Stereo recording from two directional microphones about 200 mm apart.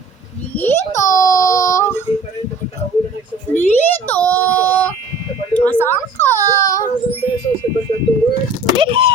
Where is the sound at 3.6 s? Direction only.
10° left (ahead or behind).